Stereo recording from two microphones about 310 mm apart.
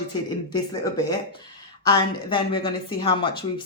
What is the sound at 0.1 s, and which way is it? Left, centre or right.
A woman's voice, centre.